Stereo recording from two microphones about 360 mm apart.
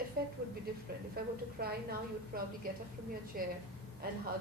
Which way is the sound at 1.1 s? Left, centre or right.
Right.